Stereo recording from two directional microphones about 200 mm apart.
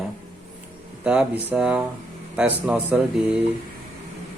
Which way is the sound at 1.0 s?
5° right (ahead or behind).